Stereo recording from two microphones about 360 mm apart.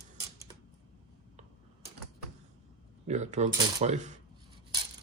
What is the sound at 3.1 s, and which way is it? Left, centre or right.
Speech, centre.